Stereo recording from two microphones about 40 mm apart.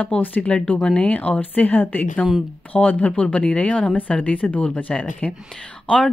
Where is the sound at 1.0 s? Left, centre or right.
Left.